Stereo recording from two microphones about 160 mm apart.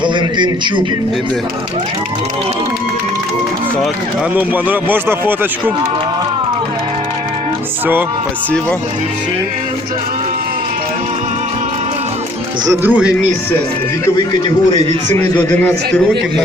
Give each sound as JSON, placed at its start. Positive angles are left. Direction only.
{"t": 0.0, "sound": "a man's voice", "side_deg": -30}
{"t": 4.4, "sound": "speech", "side_deg": -10}
{"t": 12.6, "sound": "speech", "side_deg": -15}
{"t": 15.1, "sound": "a man's voice", "side_deg": 10}